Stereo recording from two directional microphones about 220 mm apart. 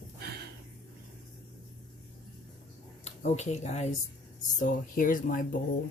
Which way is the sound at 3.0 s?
30° left (ahead or behind).